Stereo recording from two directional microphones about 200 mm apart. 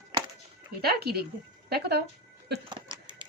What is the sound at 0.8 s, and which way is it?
A woman's voice, 50° right (ahead or behind).